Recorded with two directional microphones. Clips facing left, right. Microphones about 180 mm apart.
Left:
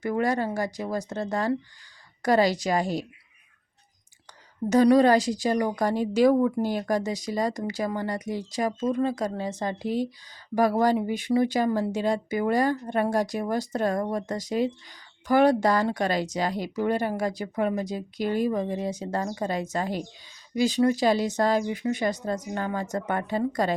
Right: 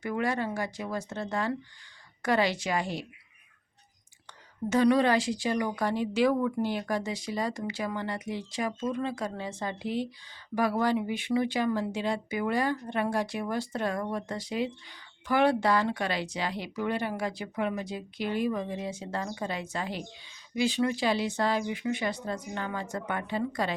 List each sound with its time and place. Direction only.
0.0 s speech: 40° left (ahead or behind)
4.7 s speech: 40° left (ahead or behind)